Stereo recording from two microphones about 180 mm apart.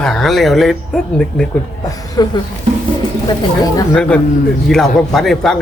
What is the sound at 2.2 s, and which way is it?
Speech, 20° left (ahead or behind).